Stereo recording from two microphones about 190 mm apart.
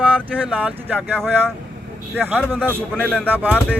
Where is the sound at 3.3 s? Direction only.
10° right (ahead or behind).